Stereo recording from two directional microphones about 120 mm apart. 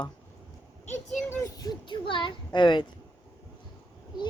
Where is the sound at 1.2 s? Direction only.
30° left (ahead or behind).